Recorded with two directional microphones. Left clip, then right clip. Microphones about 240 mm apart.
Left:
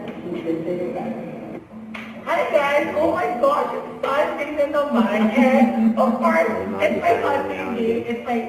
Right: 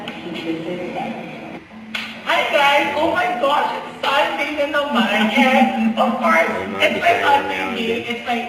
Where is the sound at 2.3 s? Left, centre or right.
Centre.